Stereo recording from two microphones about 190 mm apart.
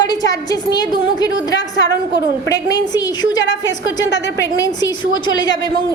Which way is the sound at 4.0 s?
70° left (ahead or behind).